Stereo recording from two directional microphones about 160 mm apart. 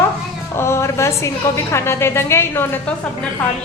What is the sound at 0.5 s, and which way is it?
A woman's voice, 15° left (ahead or behind).